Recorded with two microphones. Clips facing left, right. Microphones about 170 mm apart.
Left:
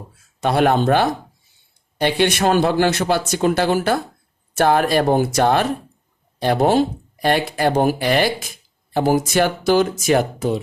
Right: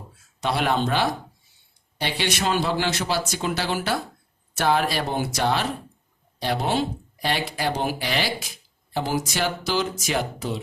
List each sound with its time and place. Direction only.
0.4 s speech: 50° left (ahead or behind)